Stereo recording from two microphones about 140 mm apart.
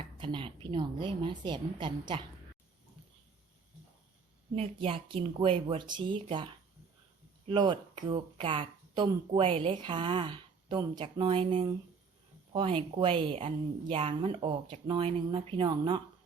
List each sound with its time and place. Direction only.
0.2 s speech: 35° right (ahead or behind)
4.5 s speech: 45° right (ahead or behind)